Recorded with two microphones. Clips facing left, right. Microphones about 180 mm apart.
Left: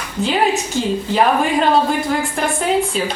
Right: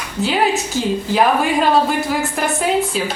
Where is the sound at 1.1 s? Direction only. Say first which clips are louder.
Even; 5° right (ahead or behind).